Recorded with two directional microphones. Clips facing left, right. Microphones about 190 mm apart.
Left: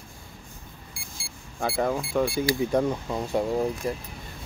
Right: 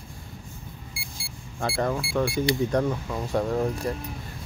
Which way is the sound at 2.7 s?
5° left (ahead or behind).